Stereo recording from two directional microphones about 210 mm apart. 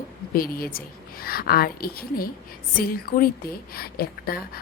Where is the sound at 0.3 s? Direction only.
45° left (ahead or behind).